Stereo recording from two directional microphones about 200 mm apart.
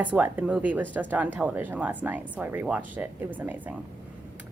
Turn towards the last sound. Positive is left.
turn(degrees=-10)  # may be behind; listen again after turning